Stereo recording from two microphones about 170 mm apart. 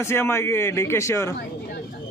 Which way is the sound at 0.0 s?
15° left (ahead or behind).